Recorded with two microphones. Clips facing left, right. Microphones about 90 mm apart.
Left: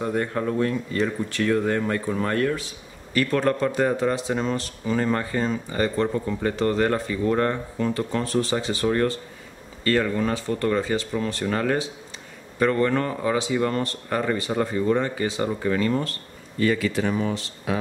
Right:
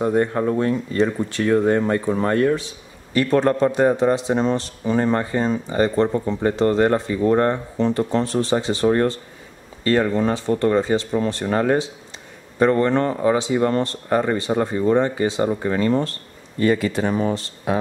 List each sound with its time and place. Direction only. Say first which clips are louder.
0.0 s speech: right 6 dB; 25° right (ahead or behind)